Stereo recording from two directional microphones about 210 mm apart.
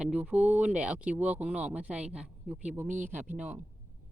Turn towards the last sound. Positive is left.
turn(degrees=-5)  # may be behind; listen again after turning